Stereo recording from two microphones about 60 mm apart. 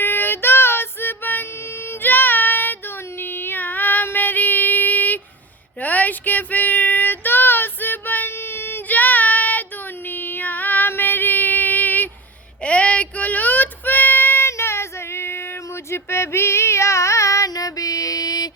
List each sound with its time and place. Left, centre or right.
0.0 s child singing: left
10.1 s female singing: left
12.6 s child singing: left